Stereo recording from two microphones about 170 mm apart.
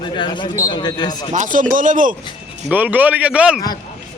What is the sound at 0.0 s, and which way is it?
Speech, 30° left (ahead or behind).